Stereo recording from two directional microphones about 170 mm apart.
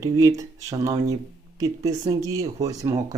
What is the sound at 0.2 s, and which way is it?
Speech, 20° right (ahead or behind).